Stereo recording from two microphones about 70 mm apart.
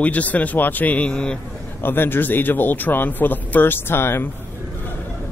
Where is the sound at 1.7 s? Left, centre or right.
Left.